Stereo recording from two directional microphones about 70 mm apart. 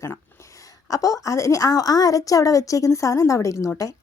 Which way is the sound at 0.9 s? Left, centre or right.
Left.